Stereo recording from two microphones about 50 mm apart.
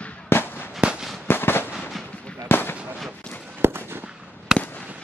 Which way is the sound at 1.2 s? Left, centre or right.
Left.